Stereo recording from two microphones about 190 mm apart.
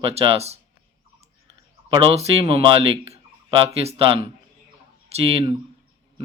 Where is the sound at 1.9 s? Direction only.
30° right (ahead or behind).